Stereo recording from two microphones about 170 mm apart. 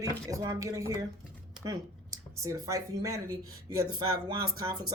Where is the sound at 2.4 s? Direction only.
20° right (ahead or behind).